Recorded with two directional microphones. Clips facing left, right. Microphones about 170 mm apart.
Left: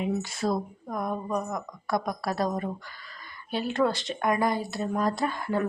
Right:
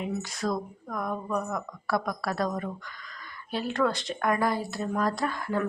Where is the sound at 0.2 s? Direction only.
25° left (ahead or behind).